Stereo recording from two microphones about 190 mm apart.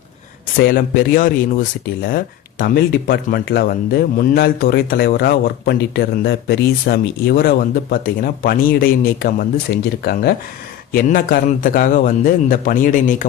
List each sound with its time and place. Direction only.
0.5 s speech: 50° left (ahead or behind)